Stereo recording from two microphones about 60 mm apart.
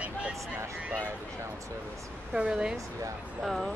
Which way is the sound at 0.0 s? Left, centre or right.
Centre.